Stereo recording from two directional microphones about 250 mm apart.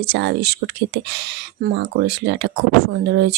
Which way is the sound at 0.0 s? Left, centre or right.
Right.